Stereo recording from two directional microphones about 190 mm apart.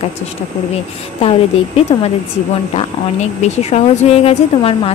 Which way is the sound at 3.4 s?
35° left (ahead or behind).